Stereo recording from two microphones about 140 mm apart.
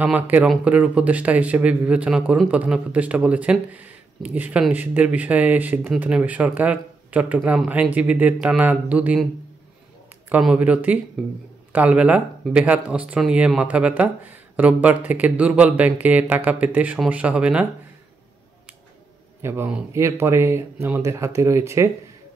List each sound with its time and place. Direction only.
0.0 s speech: 10° right (ahead or behind)
10.3 s speech: 10° right (ahead or behind)
19.4 s speech: 15° right (ahead or behind)